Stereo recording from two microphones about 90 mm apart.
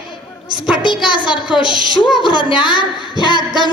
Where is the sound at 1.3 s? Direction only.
65° left (ahead or behind).